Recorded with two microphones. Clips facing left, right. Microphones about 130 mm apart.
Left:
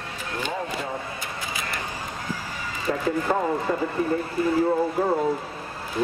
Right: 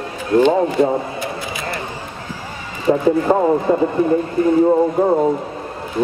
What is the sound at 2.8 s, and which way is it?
Speech, 30° right (ahead or behind).